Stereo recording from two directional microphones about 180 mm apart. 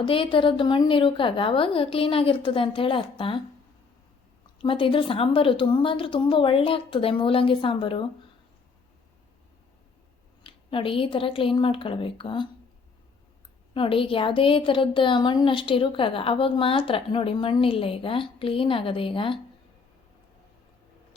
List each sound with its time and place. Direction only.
0.0 s a woman's voice: 30° left (ahead or behind)
4.5 s a woman's voice: 30° left (ahead or behind)
10.4 s a woman's voice: 30° left (ahead or behind)
13.7 s a woman's voice: 30° left (ahead or behind)